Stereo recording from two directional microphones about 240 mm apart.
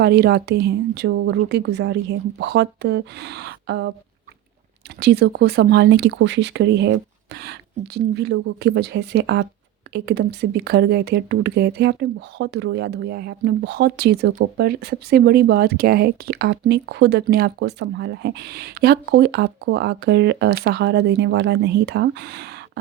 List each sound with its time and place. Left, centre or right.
0.0 s speech: right
4.9 s speech: right
7.9 s speech: right